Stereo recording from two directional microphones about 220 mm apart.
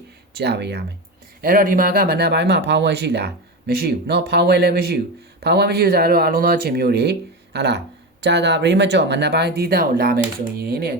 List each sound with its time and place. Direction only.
0.3 s speech: 50° right (ahead or behind)